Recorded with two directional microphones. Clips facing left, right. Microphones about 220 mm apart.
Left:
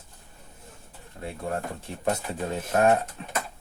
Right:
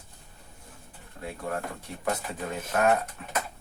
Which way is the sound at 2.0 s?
30° left (ahead or behind).